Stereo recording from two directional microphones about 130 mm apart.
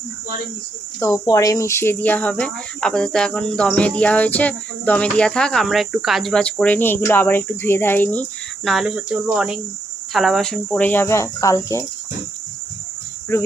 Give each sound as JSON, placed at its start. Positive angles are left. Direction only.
{"t": 0.9, "sound": "speech", "side_deg": 20}
{"t": 8.6, "sound": "speech", "side_deg": 0}
{"t": 10.8, "sound": "speech", "side_deg": 15}
{"t": 13.3, "sound": "speech", "side_deg": 20}